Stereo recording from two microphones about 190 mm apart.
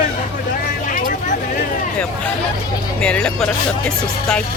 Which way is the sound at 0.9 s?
40° left (ahead or behind).